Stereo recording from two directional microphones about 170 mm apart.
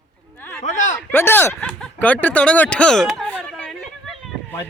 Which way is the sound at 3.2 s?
5° left (ahead or behind).